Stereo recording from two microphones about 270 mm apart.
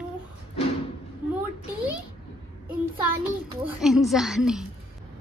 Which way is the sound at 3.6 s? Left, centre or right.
Centre.